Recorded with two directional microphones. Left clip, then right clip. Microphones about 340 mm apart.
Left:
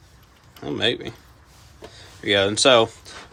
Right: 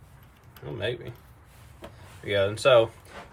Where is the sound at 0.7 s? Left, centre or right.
Centre.